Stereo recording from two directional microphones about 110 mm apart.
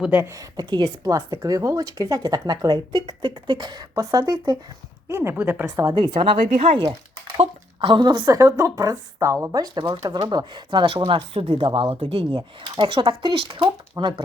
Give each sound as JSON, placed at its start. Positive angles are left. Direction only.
{"t": 0.3, "sound": "speech", "side_deg": -35}
{"t": 5.0, "sound": "a woman's voice", "side_deg": -20}
{"t": 6.0, "sound": "speech", "side_deg": -50}
{"t": 8.4, "sound": "speech", "side_deg": -30}
{"t": 10.8, "sound": "speech", "side_deg": -55}